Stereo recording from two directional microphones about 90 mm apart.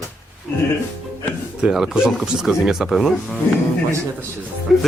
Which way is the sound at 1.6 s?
10° right (ahead or behind).